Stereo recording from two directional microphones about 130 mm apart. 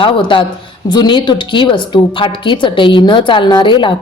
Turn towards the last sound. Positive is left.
turn(degrees=35)  # may be behind; listen again after turning